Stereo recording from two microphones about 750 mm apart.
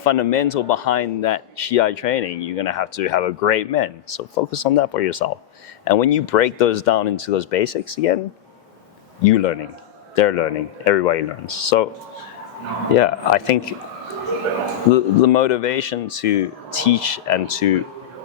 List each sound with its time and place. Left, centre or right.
0.0 s speech: left
9.2 s speech: left
13.0 s speech: left
14.9 s speech: left